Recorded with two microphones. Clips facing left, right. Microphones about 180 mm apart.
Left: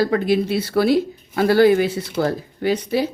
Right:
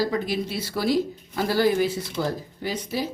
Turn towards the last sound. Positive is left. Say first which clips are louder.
# left 8 dB
turn(degrees=70)  # may be behind; listen again after turning